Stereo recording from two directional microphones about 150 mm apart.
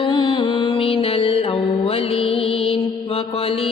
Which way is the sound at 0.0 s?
30° left (ahead or behind).